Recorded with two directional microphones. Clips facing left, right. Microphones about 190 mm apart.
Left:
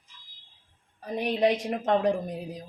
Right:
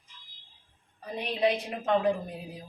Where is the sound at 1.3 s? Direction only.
45° left (ahead or behind).